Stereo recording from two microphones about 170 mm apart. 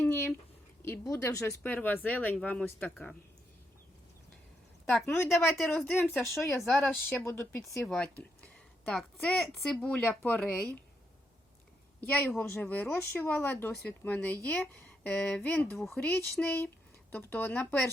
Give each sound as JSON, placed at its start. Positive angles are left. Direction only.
{"t": 0.0, "sound": "a sound", "side_deg": 15}
{"t": 0.9, "sound": "a woman's voice", "side_deg": 15}
{"t": 5.0, "sound": "a woman's voice", "side_deg": 15}
{"t": 7.2, "sound": "a woman's voice", "side_deg": 15}
{"t": 12.0, "sound": "a woman's voice", "side_deg": 10}